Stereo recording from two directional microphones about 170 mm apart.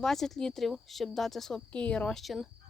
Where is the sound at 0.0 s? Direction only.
Centre (ahead or behind).